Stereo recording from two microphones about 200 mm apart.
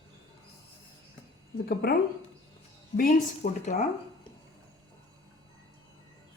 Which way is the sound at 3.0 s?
40° left (ahead or behind).